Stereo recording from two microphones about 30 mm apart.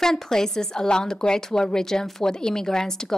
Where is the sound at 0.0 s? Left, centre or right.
Centre.